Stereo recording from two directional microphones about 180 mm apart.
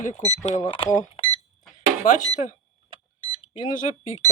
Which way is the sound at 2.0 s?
45° left (ahead or behind).